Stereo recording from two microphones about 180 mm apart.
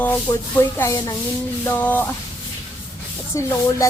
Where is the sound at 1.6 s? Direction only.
10° left (ahead or behind).